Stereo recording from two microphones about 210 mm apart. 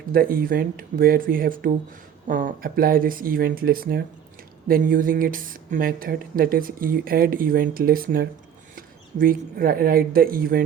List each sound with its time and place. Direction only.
0.1 s speech: 45° right (ahead or behind)